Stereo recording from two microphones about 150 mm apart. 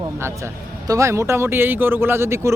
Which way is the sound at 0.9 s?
20° right (ahead or behind).